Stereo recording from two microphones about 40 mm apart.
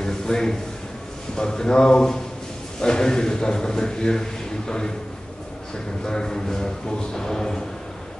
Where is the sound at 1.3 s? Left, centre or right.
Centre.